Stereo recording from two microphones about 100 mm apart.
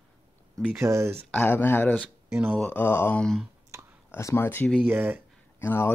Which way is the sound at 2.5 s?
15° left (ahead or behind).